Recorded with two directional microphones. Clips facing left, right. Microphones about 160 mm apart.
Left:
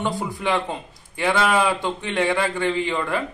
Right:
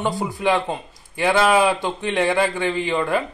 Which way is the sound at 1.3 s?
35° right (ahead or behind).